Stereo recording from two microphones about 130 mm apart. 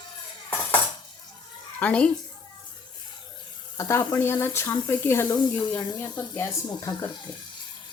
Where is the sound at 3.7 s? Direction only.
25° left (ahead or behind).